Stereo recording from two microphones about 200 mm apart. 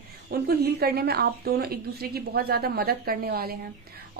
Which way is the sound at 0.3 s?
50° right (ahead or behind).